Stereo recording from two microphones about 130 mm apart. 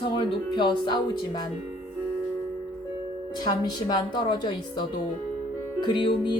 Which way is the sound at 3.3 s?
30° left (ahead or behind).